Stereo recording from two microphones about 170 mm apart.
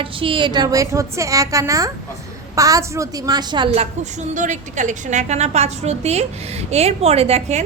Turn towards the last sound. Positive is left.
turn(degrees=-40)  # may be behind; listen again after turning